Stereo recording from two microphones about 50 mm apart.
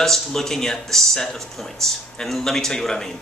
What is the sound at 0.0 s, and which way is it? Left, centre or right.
Speech, centre.